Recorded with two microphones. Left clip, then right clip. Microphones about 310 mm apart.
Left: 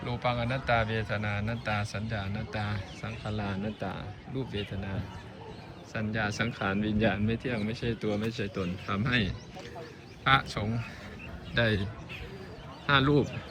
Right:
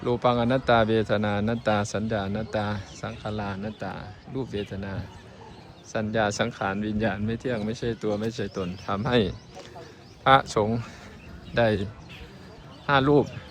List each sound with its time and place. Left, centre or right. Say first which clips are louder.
0.0 s speech: right 8 dB; centre